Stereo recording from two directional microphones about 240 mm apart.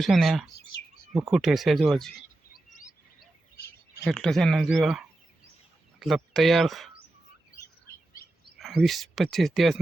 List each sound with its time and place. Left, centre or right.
0.0 s speech: centre
2.5 s bird vocalization: left
4.0 s speech: centre
8.5 s speech: centre